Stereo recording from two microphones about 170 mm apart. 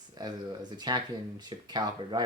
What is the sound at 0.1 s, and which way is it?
Speech, 25° right (ahead or behind).